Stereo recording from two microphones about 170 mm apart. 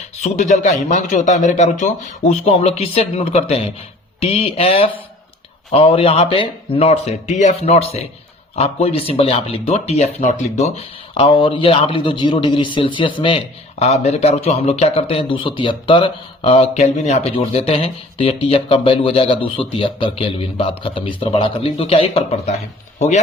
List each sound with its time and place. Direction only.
0.2 s a man's voice: 45° left (ahead or behind)